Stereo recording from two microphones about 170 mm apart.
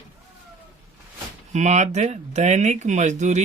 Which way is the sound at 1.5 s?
45° right (ahead or behind).